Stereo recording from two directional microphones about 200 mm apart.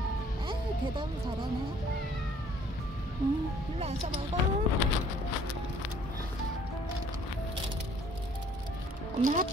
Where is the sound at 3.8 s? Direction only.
30° right (ahead or behind).